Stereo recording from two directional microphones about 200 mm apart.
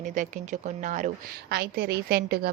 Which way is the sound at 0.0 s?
40° right (ahead or behind).